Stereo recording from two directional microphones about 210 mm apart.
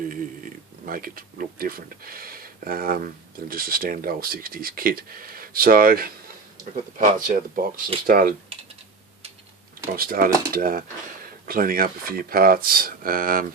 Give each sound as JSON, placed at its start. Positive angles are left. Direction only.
{"t": 0.9, "sound": "speech", "side_deg": -45}
{"t": 9.9, "sound": "speech", "side_deg": -45}